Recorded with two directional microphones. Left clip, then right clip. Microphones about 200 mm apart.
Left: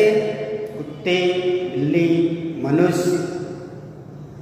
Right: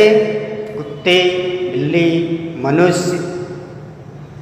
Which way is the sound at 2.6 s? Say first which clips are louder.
Right 5 dB; 15° right (ahead or behind).